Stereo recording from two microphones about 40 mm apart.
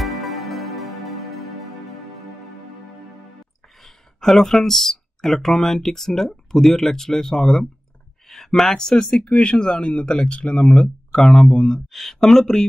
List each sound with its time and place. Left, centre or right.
0.0 s music: centre
3.8 s speech: centre
8.3 s a sound: centre
8.7 s speech: centre
11.9 s speech: centre